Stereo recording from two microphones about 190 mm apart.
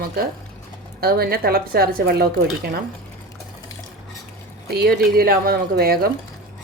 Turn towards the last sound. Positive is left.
turn(degrees=-55)  # may be behind; listen again after turning